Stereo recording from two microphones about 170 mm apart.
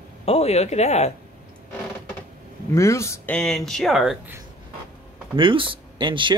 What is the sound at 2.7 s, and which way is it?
Speech, 15° left (ahead or behind).